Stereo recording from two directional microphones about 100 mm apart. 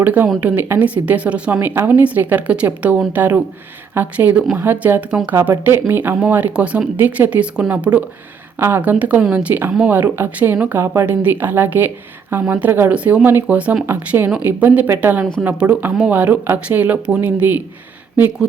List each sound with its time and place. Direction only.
0.0 s a woman's voice: 15° right (ahead or behind)